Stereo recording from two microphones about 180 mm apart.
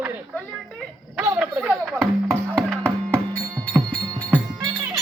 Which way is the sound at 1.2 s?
5° right (ahead or behind).